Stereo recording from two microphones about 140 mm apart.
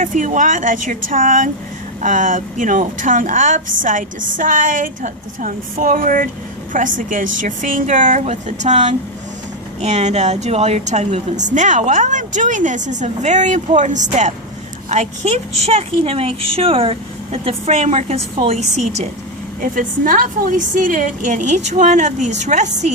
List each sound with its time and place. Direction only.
0.0 s a woman's voice: 65° right (ahead or behind)
19.6 s a woman's voice: 70° right (ahead or behind)